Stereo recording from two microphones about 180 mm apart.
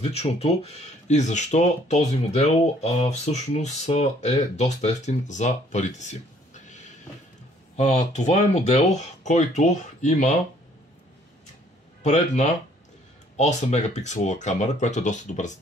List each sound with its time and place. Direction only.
0.0 s speech: 35° left (ahead or behind)
12.0 s speech: 40° left (ahead or behind)